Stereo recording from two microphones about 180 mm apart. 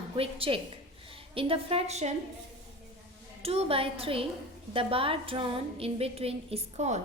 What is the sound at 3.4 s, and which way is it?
A woman's voice, 35° right (ahead or behind).